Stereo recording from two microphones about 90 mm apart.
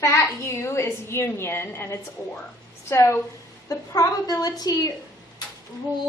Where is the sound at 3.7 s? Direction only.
40° left (ahead or behind).